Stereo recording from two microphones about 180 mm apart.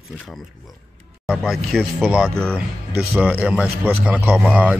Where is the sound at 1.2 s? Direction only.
5° right (ahead or behind).